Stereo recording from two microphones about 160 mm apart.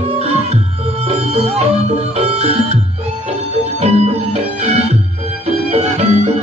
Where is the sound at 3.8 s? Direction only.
40° right (ahead or behind).